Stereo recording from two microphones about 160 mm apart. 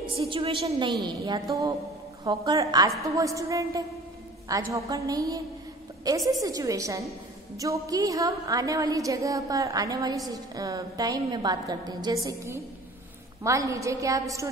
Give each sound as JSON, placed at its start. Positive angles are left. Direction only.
{"t": 0.0, "sound": "a woman's voice", "side_deg": -35}